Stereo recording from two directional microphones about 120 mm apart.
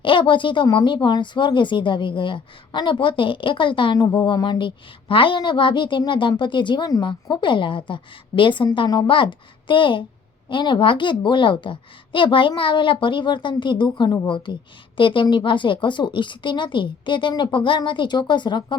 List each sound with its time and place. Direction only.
0.0 s a woman's voice: 45° left (ahead or behind)